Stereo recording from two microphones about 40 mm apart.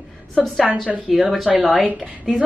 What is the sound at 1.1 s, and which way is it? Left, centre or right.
Speech, centre.